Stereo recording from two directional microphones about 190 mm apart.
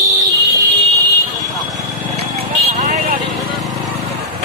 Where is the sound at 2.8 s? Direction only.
40° right (ahead or behind).